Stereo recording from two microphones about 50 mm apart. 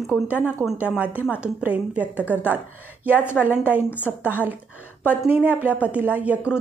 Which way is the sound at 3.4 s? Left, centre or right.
Right.